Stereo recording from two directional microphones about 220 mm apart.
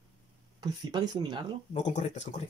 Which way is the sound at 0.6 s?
20° right (ahead or behind).